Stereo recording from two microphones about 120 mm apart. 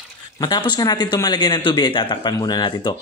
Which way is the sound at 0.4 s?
40° left (ahead or behind).